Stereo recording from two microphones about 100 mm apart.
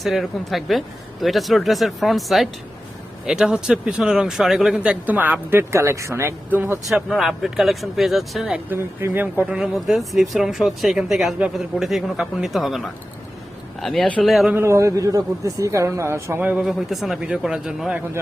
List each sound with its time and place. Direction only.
0.0 s speech: centre (ahead or behind); by 6.7 s 20° right (ahead or behind)
6.8 s speech: centre (ahead or behind)
8.7 s speech: 25° right (ahead or behind)
9.6 s speech: 5° right (ahead or behind)
14.5 s speech: 30° right (ahead or behind)
16.4 s speech: 15° right (ahead or behind)
16.6 s speech: centre (ahead or behind)